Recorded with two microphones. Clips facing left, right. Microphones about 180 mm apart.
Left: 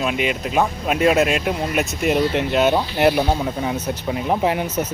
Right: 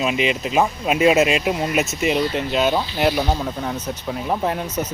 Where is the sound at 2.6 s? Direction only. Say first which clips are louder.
Left 3 dB; 10° left (ahead or behind).